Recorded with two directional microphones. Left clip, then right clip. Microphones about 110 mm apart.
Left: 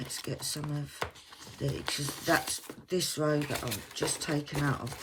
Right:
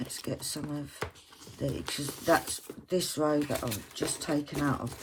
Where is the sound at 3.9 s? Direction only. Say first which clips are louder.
Even; 45° right (ahead or behind).